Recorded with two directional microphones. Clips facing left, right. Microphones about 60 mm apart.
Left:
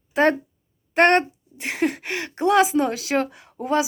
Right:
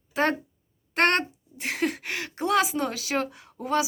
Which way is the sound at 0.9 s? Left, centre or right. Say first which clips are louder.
Left 6 dB; left.